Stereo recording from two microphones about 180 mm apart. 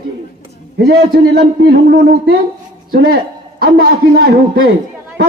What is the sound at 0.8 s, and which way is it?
A man's voice, 65° right (ahead or behind).